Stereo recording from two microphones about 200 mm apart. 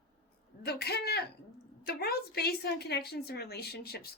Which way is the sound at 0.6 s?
55° left (ahead or behind).